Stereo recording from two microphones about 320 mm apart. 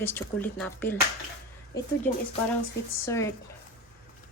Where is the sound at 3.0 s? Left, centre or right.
Centre.